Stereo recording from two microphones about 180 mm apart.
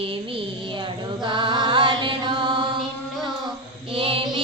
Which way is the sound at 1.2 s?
25° right (ahead or behind).